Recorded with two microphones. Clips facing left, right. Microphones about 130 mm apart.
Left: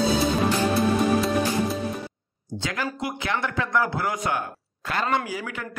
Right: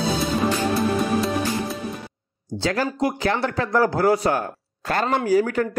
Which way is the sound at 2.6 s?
35° right (ahead or behind).